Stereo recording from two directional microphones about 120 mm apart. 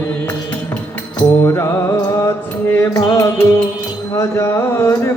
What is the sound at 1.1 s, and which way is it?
Mantra, 25° left (ahead or behind).